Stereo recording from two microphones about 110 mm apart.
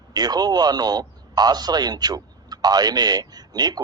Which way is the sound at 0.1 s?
35° right (ahead or behind).